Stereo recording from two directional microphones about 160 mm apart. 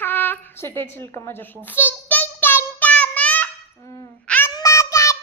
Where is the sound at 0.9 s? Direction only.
15° left (ahead or behind).